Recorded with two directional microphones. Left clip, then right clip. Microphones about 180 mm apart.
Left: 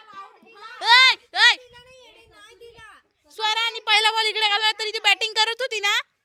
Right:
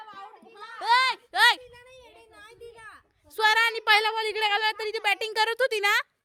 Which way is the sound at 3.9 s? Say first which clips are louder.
Left 5 dB; 15° right (ahead or behind).